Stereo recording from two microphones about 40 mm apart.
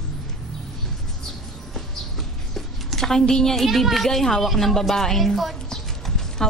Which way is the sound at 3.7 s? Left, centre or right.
Centre.